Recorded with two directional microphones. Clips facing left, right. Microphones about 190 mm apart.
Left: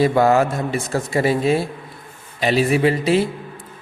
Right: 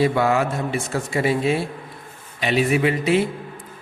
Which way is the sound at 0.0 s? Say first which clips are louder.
Left 4 dB; 40° left (ahead or behind).